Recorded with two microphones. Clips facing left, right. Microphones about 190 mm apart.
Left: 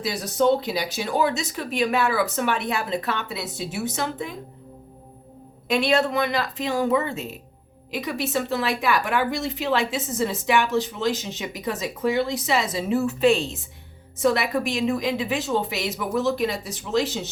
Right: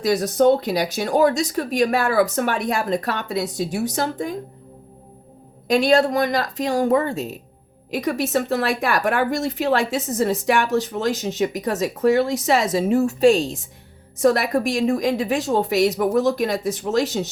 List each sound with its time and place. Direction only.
0.3 s a woman's voice: 45° right (ahead or behind)
5.6 s a woman's voice: 40° right (ahead or behind)